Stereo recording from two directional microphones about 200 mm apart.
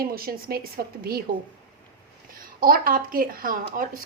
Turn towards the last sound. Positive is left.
turn(degrees=-45)  # may be behind; listen again after turning